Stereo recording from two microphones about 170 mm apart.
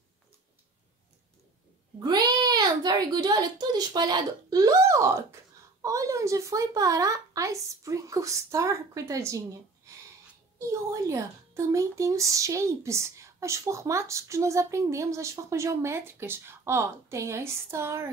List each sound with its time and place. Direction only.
2.0 s a child's voice: 25° right (ahead or behind)
10.7 s a child's voice: 20° right (ahead or behind)